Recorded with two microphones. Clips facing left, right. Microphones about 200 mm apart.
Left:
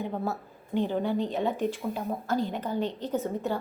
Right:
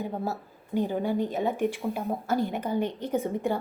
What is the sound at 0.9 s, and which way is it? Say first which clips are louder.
Speech: right 1 dB; 10° right (ahead or behind).